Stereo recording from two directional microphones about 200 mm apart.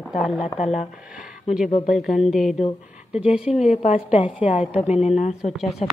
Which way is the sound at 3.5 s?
35° left (ahead or behind).